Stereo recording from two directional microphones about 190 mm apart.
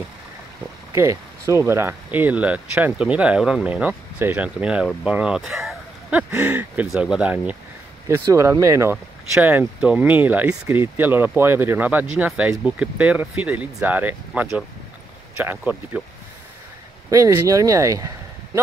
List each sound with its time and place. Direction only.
0.9 s speech: 15° right (ahead or behind)
17.1 s speech: 15° right (ahead or behind)